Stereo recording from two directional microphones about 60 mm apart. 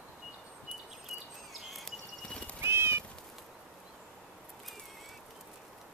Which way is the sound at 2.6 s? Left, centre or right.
Right.